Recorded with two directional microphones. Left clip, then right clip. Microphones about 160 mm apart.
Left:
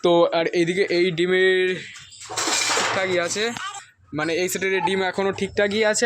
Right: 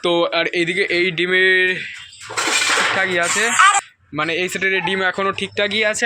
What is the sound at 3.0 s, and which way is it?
Speech, 5° left (ahead or behind).